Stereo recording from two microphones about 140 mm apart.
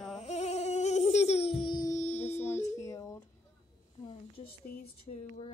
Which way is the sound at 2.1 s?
50° left (ahead or behind).